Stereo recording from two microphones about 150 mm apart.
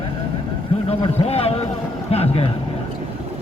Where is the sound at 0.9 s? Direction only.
40° left (ahead or behind).